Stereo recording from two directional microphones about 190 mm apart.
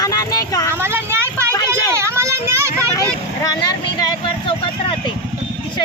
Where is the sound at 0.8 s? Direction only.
10° right (ahead or behind).